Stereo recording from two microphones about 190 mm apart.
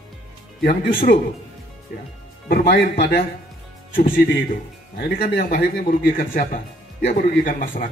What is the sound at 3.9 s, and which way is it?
A man's voice, 50° left (ahead or behind).